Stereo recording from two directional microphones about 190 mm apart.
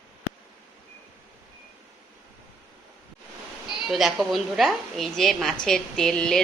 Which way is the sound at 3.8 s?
Centre (ahead or behind).